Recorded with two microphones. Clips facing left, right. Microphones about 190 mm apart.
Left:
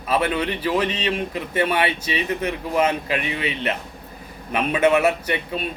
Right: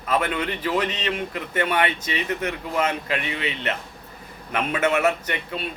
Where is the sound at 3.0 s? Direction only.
15° left (ahead or behind).